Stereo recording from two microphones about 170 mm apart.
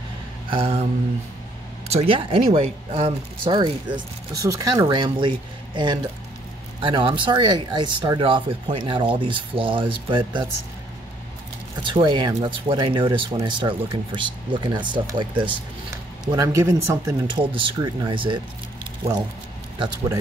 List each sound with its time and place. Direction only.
0.5 s speech: 35° right (ahead or behind)
1.9 s speech: 35° right (ahead or behind)
6.8 s speech: 30° right (ahead or behind)
11.8 s speech: 30° right (ahead or behind)
17.4 s speech: 30° right (ahead or behind)